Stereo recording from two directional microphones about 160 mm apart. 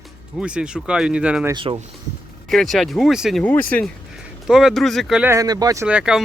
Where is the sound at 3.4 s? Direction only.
10° left (ahead or behind).